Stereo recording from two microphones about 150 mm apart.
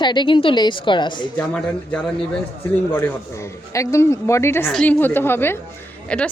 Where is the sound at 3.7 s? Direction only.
20° left (ahead or behind).